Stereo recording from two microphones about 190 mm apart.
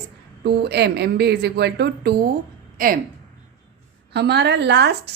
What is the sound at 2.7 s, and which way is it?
Speech, 45° right (ahead or behind).